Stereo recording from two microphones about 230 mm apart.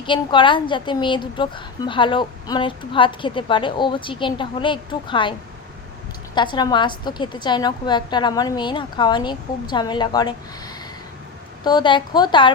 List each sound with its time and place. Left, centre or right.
0.0 s a woman's voice: left
6.3 s a woman's voice: centre
11.6 s a woman's voice: centre